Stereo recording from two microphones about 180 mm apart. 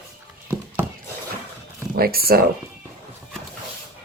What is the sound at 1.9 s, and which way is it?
Speech, 60° right (ahead or behind).